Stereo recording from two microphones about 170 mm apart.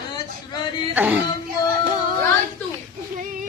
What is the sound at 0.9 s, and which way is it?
Speech, 10° right (ahead or behind).